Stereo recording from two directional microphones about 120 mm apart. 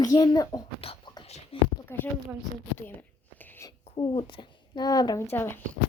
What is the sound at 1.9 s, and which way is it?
Speech, 20° left (ahead or behind).